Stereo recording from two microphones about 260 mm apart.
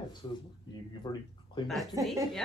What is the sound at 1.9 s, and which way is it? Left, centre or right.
Speech, centre.